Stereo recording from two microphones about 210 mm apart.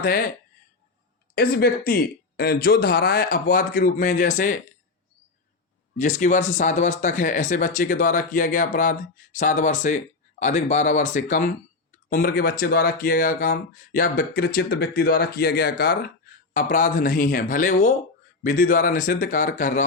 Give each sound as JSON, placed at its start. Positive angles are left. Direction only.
{"t": 0.0, "sound": "speech", "side_deg": 45}
{"t": 1.4, "sound": "speech", "side_deg": 45}
{"t": 6.0, "sound": "speech", "side_deg": 35}